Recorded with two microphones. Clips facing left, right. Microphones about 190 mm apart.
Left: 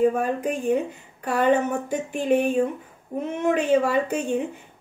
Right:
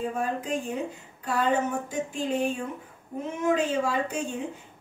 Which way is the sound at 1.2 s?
60° left (ahead or behind).